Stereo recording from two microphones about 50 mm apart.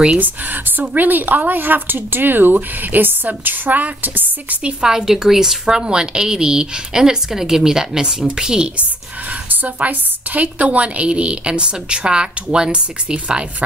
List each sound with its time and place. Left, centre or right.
0.2 s speech: right
4.8 s a woman's voice: centre
9.5 s a woman's voice: right